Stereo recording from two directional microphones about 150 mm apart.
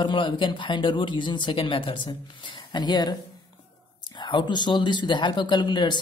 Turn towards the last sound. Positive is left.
turn(degrees=30)  # may be behind; listen again after turning